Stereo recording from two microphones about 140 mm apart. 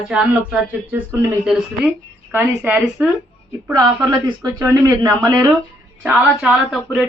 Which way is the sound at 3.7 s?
25° right (ahead or behind).